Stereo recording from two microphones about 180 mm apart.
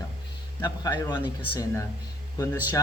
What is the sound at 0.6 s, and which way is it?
Speech, 20° left (ahead or behind).